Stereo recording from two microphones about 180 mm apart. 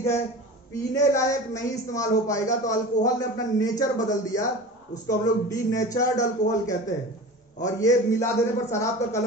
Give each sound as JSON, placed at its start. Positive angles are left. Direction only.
{"t": 0.9, "sound": "a man's voice", "side_deg": 20}